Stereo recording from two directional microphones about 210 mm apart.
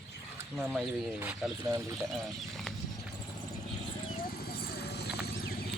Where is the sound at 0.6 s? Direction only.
5° right (ahead or behind).